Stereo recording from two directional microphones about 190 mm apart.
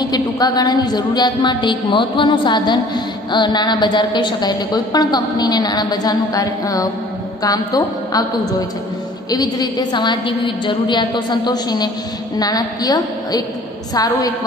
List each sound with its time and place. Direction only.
0.0 s a woman's voice: 20° left (ahead or behind)
9.3 s a woman's voice: 20° left (ahead or behind)